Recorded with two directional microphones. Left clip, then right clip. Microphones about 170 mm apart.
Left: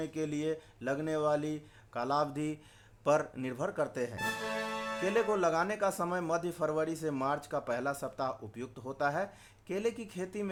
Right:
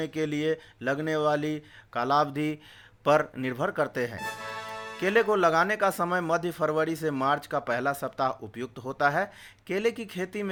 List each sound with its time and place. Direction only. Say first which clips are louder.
0.0 s speech: right 6 dB; 15° right (ahead or behind)
4.2 s speech: even; centre (ahead or behind)
4.9 s speech: right 8 dB; 15° right (ahead or behind)